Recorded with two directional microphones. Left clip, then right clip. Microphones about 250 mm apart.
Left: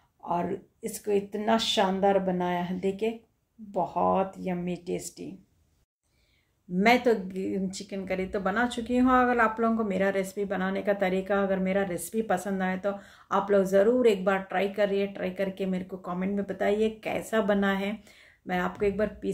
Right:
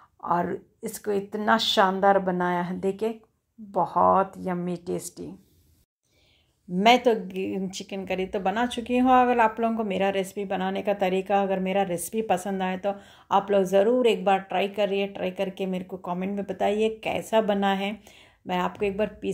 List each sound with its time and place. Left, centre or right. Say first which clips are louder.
1.3 s speech: right 7 dB; centre
6.8 s speech: right 3 dB; centre